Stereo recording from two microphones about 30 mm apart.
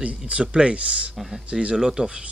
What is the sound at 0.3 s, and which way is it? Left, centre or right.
Speech, right.